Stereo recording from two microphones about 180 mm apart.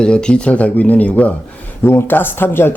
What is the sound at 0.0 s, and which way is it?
Speech, 5° left (ahead or behind).